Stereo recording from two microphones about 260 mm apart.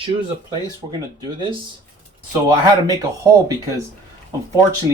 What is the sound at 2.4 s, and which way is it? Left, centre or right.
Speech, centre.